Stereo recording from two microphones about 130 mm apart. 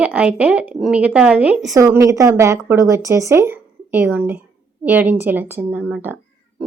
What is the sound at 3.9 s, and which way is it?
Speech, 10° right (ahead or behind).